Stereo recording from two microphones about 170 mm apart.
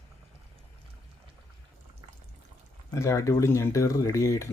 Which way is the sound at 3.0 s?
15° left (ahead or behind).